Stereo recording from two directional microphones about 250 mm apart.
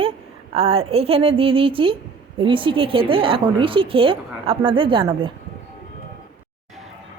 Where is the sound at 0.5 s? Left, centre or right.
Right.